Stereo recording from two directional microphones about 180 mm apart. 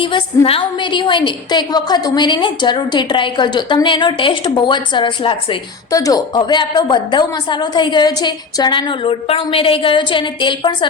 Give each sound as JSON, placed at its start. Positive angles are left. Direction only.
{"t": 0.0, "sound": "a woman's voice", "side_deg": 30}